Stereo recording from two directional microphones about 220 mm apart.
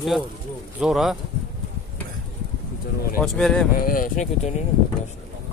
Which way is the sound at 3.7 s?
40° left (ahead or behind).